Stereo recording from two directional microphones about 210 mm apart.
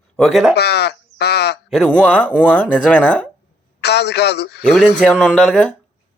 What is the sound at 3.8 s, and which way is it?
Speech, 50° left (ahead or behind).